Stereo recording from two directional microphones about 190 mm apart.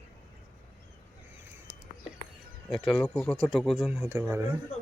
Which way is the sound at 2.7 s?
Centre (ahead or behind).